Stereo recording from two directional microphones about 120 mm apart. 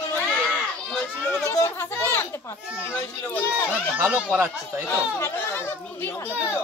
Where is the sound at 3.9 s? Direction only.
10° right (ahead or behind).